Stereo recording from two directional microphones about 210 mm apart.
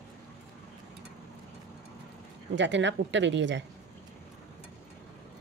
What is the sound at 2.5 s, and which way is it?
Speech, 60° right (ahead or behind).